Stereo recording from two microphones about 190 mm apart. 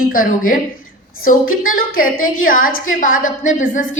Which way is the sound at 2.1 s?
90° left.